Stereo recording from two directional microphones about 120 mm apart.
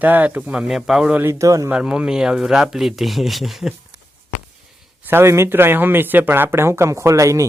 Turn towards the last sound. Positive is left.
turn(degrees=-25)  # may be behind; listen again after turning